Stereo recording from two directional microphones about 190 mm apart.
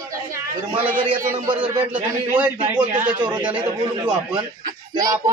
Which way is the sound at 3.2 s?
20° right (ahead or behind).